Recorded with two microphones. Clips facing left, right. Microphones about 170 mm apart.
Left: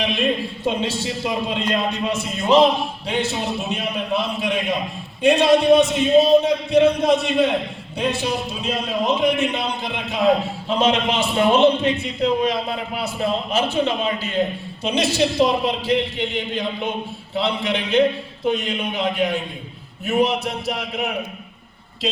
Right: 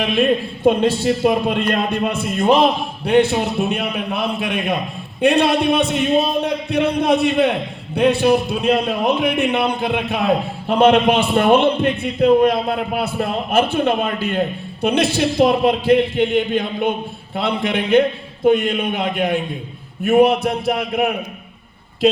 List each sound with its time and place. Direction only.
0.0 s a man's voice: 55° right (ahead or behind)